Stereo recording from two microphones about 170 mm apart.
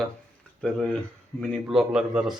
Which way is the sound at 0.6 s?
Centre (ahead or behind).